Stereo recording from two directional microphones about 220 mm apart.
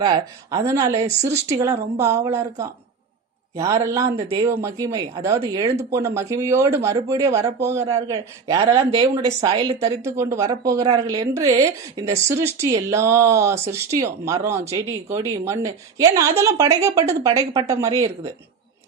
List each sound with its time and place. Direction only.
0.0 s a woman's voice: 15° right (ahead or behind)